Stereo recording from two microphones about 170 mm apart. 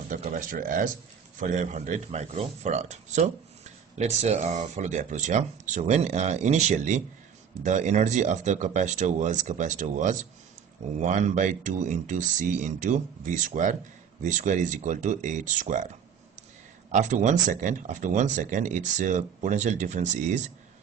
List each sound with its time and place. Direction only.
0.1 s speech: 50° right (ahead or behind)